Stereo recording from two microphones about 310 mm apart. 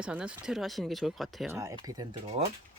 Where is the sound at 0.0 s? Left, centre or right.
Centre.